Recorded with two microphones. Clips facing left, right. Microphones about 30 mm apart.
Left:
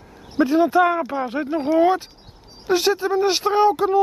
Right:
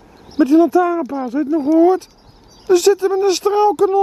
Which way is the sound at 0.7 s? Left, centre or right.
Left.